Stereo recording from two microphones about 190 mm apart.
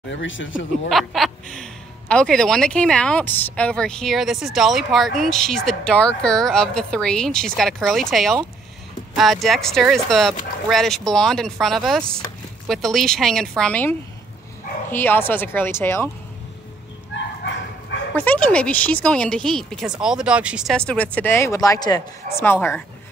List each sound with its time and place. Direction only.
0.1 s speech: 85° left
0.8 s speech: centre (ahead or behind)
18.1 s speech: 10° left (ahead or behind)